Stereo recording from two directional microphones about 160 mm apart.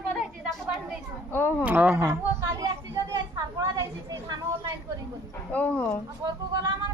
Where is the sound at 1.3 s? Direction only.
15° left (ahead or behind).